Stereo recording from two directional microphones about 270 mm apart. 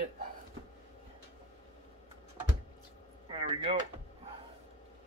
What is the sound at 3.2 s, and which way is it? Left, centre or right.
Speech, centre.